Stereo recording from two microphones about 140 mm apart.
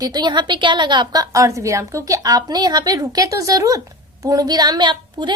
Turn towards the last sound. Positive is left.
turn(degrees=-30)  # may be behind; listen again after turning